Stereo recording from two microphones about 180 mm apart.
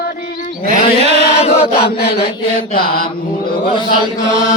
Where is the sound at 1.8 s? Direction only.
60° left (ahead or behind).